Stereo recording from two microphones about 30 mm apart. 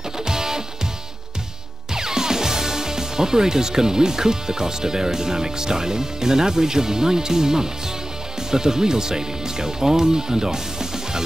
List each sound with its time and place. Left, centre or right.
0.2 s music: centre
2.0 s speech: centre